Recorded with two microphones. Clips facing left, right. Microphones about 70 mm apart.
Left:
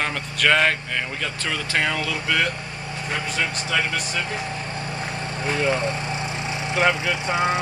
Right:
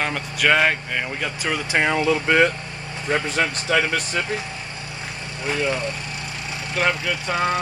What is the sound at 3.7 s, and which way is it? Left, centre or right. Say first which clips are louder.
Speech: right 4 dB; right.